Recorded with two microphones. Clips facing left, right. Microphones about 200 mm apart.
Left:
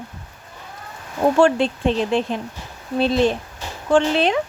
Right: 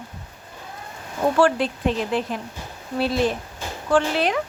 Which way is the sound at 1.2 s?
25° left (ahead or behind).